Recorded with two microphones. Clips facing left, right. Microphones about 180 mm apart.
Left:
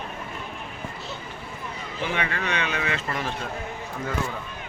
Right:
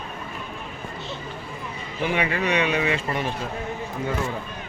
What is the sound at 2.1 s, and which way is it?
Speech, 10° right (ahead or behind).